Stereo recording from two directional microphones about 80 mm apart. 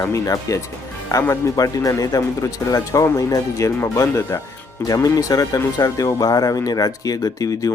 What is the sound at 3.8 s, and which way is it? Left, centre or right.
Speech, left.